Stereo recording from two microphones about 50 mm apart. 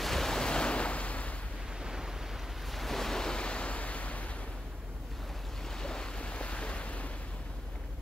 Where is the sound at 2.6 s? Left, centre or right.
Centre; by 4.3 s left.